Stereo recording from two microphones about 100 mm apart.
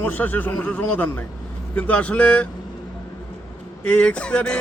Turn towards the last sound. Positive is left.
turn(degrees=10)  # may be behind; listen again after turning